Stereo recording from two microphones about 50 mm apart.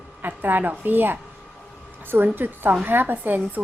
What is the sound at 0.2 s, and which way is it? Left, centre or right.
A woman's voice, right.